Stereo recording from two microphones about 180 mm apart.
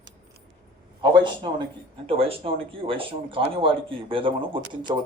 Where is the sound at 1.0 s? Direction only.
25° right (ahead or behind).